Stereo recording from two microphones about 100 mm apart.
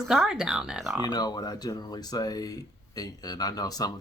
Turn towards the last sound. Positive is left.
turn(degrees=40)  # may be behind; listen again after turning